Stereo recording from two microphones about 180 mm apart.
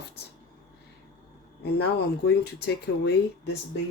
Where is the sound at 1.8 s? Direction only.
65° left (ahead or behind).